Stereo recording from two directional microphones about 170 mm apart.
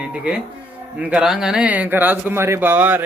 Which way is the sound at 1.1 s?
5° right (ahead or behind).